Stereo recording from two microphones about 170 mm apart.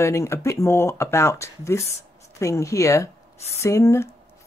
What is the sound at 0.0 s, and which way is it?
Speech, 15° left (ahead or behind).